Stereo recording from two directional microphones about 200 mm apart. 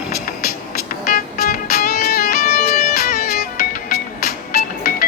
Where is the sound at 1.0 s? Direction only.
45° left (ahead or behind).